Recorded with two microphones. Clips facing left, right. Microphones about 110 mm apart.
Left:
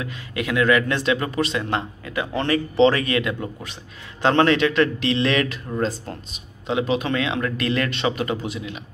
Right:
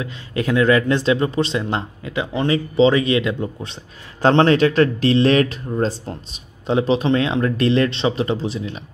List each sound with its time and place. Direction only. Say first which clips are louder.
0.0 s speech: right 4 dB; 30° right (ahead or behind)